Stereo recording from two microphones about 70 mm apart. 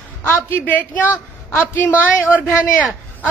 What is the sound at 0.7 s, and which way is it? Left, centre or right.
Speech, left.